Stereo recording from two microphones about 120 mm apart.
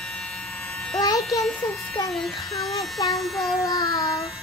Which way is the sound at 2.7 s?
30° left (ahead or behind).